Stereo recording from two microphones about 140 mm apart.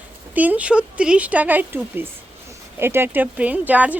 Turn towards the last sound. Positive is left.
turn(degrees=-10)  # may be behind; listen again after turning